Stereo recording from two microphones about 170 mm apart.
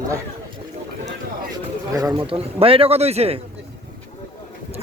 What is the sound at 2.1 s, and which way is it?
A man's voice, 30° right (ahead or behind).